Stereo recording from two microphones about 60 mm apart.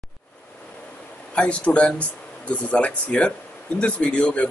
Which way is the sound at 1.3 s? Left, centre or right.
Centre.